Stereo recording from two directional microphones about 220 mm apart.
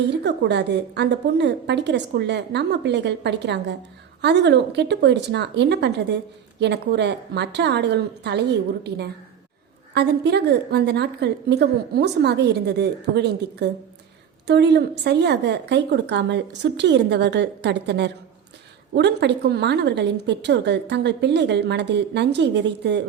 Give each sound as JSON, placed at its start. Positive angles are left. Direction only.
{"t": 0.1, "sound": "a woman's voice", "side_deg": -50}